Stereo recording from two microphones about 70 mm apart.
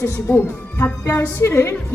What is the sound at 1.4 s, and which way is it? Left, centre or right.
Music, left.